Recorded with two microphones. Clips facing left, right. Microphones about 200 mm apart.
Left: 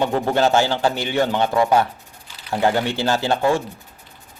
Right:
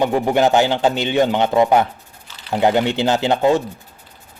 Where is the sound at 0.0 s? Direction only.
15° right (ahead or behind).